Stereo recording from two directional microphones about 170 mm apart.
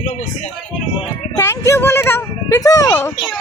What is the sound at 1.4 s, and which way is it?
Speech, 15° left (ahead or behind).